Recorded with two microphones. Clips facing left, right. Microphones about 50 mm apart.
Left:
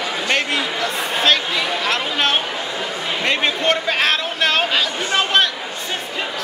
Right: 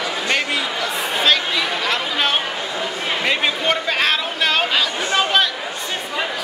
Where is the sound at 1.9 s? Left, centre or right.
Centre.